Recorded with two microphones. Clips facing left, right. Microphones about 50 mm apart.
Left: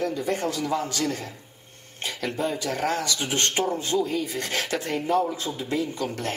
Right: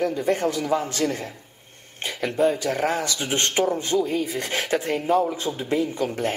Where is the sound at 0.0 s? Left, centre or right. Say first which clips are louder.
Right 4 dB; right.